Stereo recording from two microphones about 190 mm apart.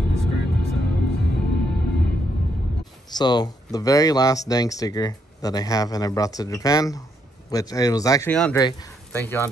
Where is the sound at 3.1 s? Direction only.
20° left (ahead or behind).